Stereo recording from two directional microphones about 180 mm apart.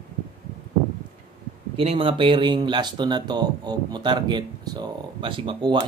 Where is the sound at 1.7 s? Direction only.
30° right (ahead or behind).